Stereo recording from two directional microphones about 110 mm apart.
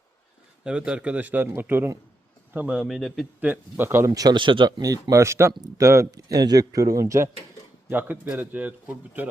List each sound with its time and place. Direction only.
0.6 s a man's voice: 10° right (ahead or behind)
3.4 s speech: 20° right (ahead or behind)
4.1 s speech: 35° right (ahead or behind)
4.8 s speech: 35° right (ahead or behind)
7.9 s a man's voice: 15° right (ahead or behind)